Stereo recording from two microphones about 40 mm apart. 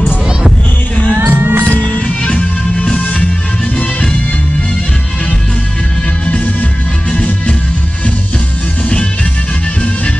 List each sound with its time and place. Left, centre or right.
1.3 s music: right
1.7 s music: left
6.2 s music: left